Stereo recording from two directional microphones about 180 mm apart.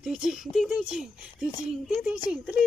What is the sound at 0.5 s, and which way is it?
A child's voice, centre (ahead or behind).